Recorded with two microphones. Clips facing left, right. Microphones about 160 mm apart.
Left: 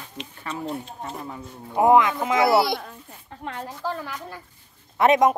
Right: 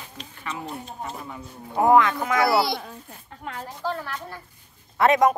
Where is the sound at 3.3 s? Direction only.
30° left (ahead or behind).